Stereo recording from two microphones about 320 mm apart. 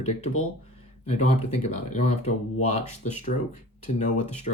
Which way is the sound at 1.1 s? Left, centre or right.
Left.